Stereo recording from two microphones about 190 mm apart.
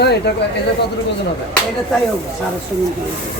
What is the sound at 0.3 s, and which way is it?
Speech, 60° left (ahead or behind).